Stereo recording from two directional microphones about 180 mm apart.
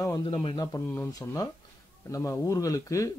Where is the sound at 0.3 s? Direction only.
30° left (ahead or behind).